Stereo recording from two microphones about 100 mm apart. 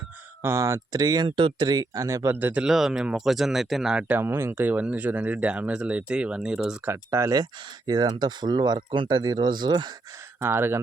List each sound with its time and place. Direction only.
0.4 s speech: 30° right (ahead or behind)
2.3 s speech: 15° right (ahead or behind)
4.1 s speech: 20° right (ahead or behind)
6.8 s speech: 30° right (ahead or behind)
7.9 s speech: 45° right (ahead or behind)
10.4 s speech: 25° right (ahead or behind)